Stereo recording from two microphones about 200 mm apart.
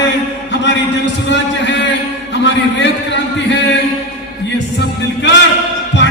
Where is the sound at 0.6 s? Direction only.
65° left (ahead or behind).